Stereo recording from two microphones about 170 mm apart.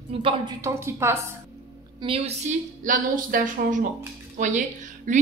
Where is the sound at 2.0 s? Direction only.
35° right (ahead or behind).